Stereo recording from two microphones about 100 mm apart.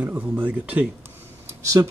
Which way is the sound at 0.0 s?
15° right (ahead or behind).